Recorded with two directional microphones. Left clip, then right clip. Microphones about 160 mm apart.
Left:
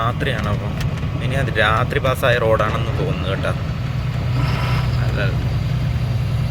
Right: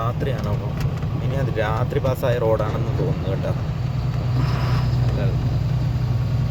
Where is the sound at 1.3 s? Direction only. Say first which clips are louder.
Left 7 dB; 10° right (ahead or behind).